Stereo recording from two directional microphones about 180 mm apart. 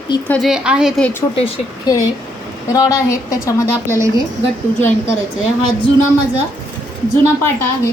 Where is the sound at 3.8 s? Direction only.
15° right (ahead or behind).